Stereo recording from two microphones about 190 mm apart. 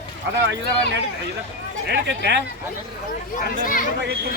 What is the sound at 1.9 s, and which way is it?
Speech, 60° right (ahead or behind).